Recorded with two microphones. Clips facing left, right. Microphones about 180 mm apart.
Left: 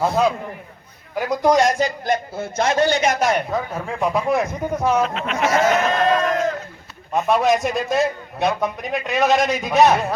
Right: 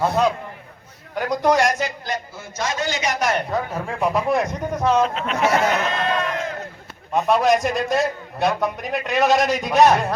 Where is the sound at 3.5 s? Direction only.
Centre (ahead or behind).